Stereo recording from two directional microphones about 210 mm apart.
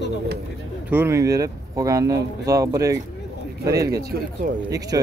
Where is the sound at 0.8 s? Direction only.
10° right (ahead or behind).